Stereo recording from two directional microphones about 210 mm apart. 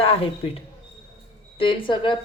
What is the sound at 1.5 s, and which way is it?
Speech, 25° left (ahead or behind).